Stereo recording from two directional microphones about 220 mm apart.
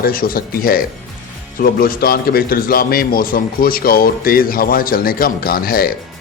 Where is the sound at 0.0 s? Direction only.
40° left (ahead or behind).